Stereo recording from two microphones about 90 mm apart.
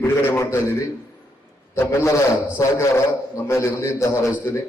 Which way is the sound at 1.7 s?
25° left (ahead or behind).